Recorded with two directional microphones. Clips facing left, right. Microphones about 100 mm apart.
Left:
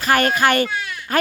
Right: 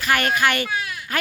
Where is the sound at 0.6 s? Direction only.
10° right (ahead or behind).